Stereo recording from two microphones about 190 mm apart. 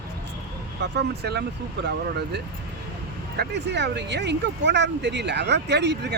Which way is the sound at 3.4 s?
65° right (ahead or behind).